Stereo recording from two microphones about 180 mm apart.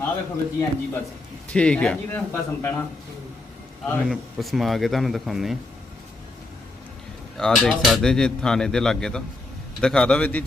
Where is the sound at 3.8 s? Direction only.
Centre (ahead or behind).